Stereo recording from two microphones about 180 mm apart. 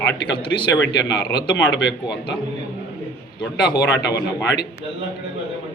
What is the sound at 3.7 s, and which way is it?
Speech, 20° left (ahead or behind).